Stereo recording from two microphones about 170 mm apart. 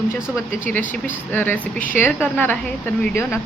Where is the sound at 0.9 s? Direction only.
10° left (ahead or behind).